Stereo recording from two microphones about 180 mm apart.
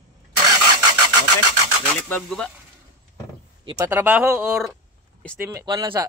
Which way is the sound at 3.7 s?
10° right (ahead or behind).